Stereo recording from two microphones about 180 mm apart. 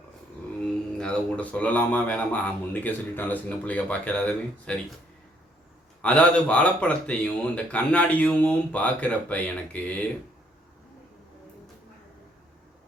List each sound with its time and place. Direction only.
0.6 s speech: 5° left (ahead or behind)
6.0 s speech: 5° left (ahead or behind)